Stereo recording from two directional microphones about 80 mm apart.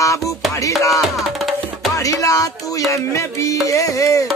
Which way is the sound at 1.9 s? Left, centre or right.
Left.